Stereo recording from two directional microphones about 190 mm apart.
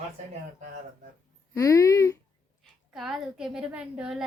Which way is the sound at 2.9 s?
Centre (ahead or behind).